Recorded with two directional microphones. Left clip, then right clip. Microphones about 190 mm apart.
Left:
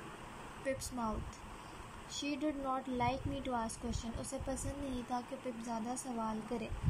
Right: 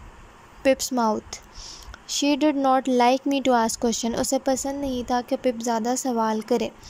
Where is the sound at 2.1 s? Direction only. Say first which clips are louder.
Right 18 dB; 65° right (ahead or behind).